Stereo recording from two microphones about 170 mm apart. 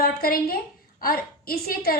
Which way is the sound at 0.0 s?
60° left (ahead or behind).